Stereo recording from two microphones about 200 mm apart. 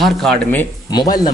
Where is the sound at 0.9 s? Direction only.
20° left (ahead or behind).